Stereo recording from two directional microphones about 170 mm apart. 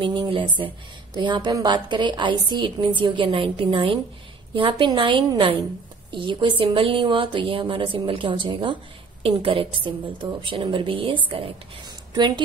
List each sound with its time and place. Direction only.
0.0 s a woman's voice: 30° right (ahead or behind)